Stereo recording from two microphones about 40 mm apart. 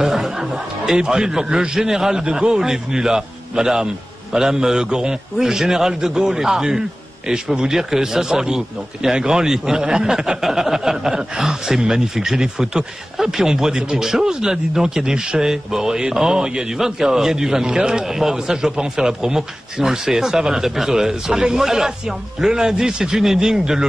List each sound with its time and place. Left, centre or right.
0.0 s a man's voice: centre